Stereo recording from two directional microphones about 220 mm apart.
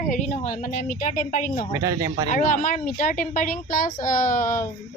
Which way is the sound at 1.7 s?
15° right (ahead or behind).